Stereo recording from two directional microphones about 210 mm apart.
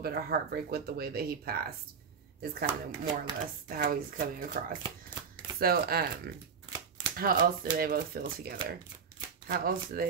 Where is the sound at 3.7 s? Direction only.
40° right (ahead or behind).